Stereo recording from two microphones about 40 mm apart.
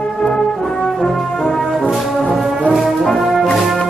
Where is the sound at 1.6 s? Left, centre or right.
Centre.